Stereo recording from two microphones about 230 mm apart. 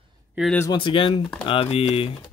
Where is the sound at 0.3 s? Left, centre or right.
Centre.